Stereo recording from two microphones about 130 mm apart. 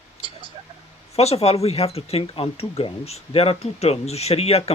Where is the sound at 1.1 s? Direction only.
55° left (ahead or behind).